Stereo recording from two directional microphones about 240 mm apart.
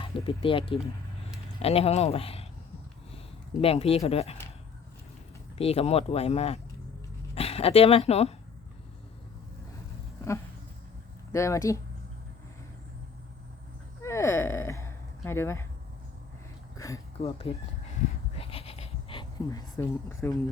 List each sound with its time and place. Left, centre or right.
0.0 s speech: left
3.6 s speech: left
5.5 s speech: left
11.3 s speech: centre
14.0 s a sound: centre
16.7 s a sound: centre
17.2 s speech: left
18.3 s bleat: left